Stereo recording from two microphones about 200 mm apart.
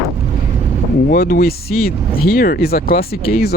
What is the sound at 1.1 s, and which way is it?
Speech, 45° left (ahead or behind).